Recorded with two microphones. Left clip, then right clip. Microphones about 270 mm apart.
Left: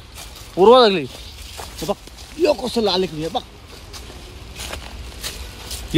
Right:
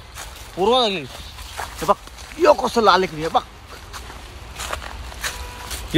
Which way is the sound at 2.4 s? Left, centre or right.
Centre.